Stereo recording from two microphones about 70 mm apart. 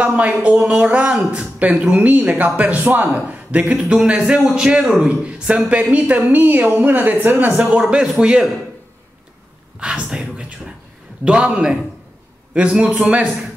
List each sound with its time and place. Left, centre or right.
0.0 s a woman's voice: right
7.5 s a man's voice: centre
9.8 s a sound: centre
11.2 s a man's voice: centre